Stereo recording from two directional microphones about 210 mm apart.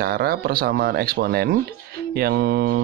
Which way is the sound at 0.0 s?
45° right (ahead or behind).